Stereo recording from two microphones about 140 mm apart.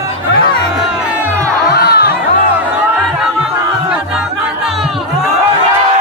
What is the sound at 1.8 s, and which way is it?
Music, 90° left.